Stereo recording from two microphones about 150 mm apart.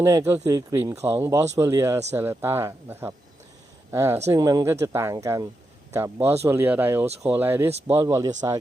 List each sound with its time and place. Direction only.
0.0 s speech: 20° right (ahead or behind)